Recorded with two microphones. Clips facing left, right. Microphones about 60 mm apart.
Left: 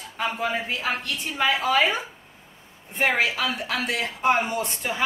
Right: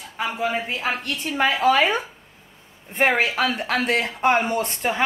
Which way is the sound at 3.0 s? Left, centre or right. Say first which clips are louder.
Right 3 dB; right.